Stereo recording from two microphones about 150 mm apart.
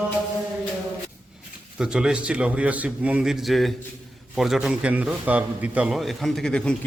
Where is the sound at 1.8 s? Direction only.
5° right (ahead or behind).